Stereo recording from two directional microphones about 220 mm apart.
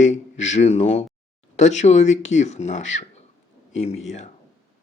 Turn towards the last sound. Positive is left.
turn(degrees=30)  # may be behind; listen again after turning